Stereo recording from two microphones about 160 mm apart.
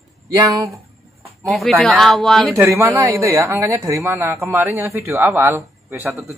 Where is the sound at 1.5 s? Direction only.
Centre (ahead or behind).